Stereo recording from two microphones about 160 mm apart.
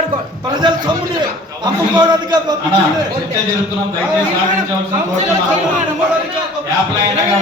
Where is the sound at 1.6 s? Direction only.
25° right (ahead or behind).